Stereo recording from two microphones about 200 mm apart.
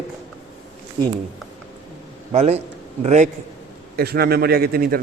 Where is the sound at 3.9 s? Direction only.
50° right (ahead or behind).